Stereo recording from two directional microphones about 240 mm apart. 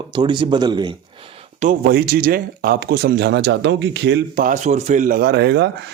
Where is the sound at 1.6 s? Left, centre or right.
Right.